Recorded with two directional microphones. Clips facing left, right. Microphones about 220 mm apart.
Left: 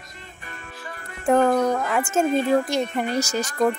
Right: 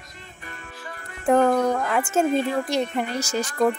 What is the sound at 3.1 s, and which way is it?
Speech, 40° left (ahead or behind).